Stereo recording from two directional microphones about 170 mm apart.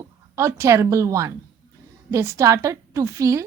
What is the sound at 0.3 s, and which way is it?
A woman's voice, 15° right (ahead or behind).